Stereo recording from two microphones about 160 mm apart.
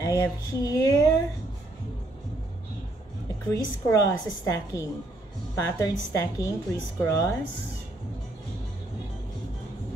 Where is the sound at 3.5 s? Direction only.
20° left (ahead or behind).